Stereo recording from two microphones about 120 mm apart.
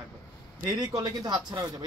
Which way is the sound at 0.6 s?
35° right (ahead or behind).